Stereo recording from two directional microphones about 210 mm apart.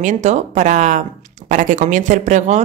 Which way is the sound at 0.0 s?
35° right (ahead or behind).